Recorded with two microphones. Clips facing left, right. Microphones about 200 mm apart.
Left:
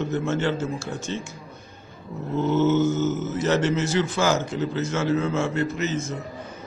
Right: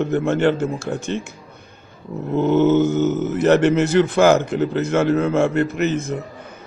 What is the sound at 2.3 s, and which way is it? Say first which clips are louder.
A man's voice: right 5 dB; 60° right (ahead or behind).